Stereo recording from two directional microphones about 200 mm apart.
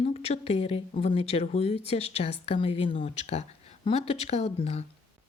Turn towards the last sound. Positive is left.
turn(degrees=30)  # may be behind; listen again after turning